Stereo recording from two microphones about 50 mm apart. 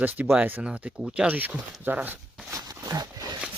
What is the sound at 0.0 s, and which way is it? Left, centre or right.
Speech, right.